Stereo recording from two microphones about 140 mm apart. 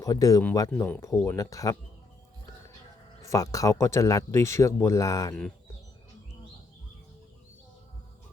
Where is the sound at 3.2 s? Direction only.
25° left (ahead or behind).